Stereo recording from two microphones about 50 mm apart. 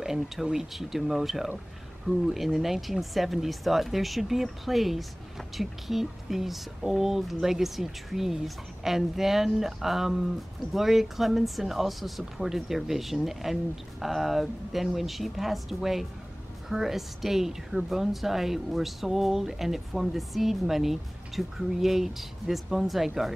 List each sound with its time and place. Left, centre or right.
0.0 s speech: centre